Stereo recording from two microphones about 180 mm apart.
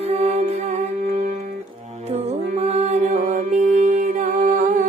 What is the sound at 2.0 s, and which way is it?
Music, 35° right (ahead or behind).